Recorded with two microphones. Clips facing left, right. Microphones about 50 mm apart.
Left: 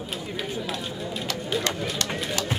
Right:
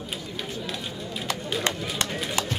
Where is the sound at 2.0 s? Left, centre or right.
Right.